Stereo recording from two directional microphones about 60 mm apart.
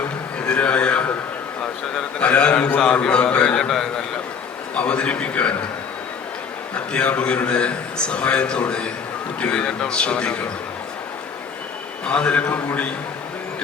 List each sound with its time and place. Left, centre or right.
0.4 s a man's voice: centre
2.2 s a man's voice: centre
4.7 s a man's voice: left
6.7 s a man's voice: left
12.0 s a man's voice: centre